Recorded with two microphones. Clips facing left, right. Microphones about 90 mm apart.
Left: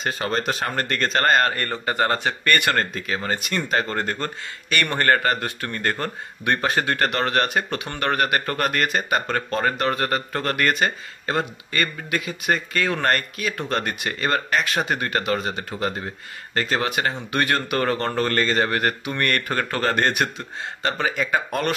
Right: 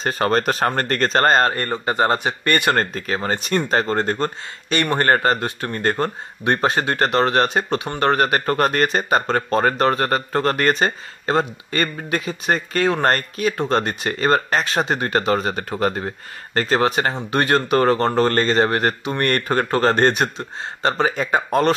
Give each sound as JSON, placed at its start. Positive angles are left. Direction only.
{"t": 0.0, "sound": "speech", "side_deg": -40}
{"t": 2.8, "sound": "speech", "side_deg": -40}